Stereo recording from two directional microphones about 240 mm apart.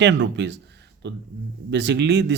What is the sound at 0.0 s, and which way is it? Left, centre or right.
Speech, right.